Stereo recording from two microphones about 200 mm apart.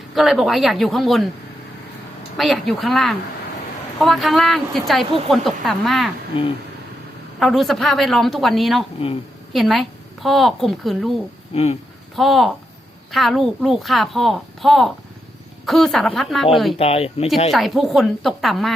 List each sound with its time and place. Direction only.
0.1 s speech: centre (ahead or behind)
2.4 s speech: centre (ahead or behind)
7.3 s speech: centre (ahead or behind)
11.5 s speech: 30° left (ahead or behind)
12.1 s speech: centre (ahead or behind)
16.7 s speech: 30° left (ahead or behind)
17.5 s speech: centre (ahead or behind)